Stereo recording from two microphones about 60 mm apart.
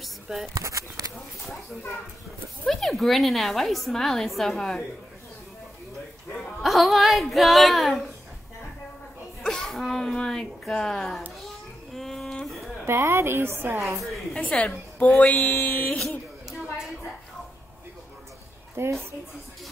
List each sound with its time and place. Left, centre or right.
0.0 s a sound: centre
0.6 s speech: right
2.6 s a woman's voice: centre
6.6 s a woman's voice: centre
9.4 s a sound: centre
10.1 s a woman's voice: centre
11.4 s a sound: centre
12.8 s a woman's voice: right
13.9 s a woman's voice: centre
14.3 s a woman's voice: left
18.8 s speech: right